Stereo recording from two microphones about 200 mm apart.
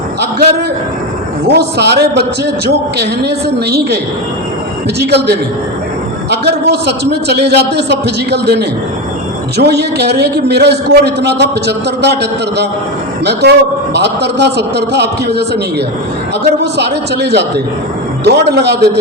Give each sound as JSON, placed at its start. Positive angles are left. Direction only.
{"t": 1.5, "sound": "a man's voice", "side_deg": -55}